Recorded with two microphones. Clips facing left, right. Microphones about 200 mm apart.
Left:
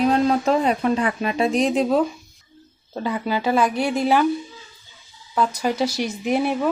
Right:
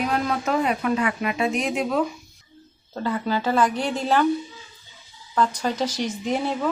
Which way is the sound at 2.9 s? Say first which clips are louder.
Left 1 dB; 15° left (ahead or behind).